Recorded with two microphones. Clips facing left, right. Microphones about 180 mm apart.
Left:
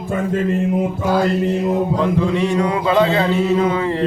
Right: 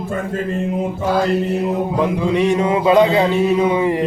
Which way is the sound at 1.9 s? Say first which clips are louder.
Right 1 dB; 15° right (ahead or behind).